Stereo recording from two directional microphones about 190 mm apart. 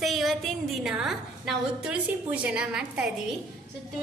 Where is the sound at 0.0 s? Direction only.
Centre (ahead or behind).